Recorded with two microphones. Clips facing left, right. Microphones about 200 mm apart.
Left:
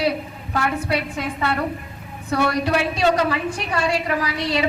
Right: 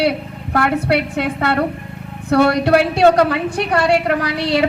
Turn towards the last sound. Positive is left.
turn(degrees=-70)  # may be behind; listen again after turning